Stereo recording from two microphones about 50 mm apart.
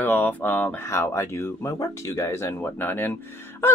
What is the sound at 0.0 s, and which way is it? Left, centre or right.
Speech, left.